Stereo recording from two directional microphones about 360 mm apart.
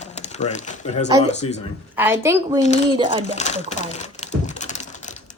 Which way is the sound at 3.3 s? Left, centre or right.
Centre.